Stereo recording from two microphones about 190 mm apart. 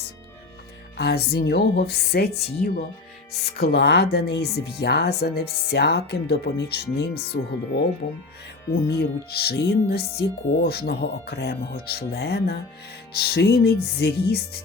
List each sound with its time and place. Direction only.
0.9 s speech: 55° left (ahead or behind)
8.9 s speech: 55° left (ahead or behind)